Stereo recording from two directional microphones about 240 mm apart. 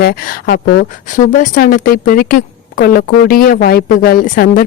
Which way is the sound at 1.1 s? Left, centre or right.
Left.